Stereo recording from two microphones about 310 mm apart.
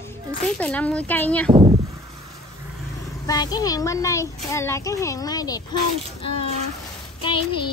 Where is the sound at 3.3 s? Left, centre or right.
Centre.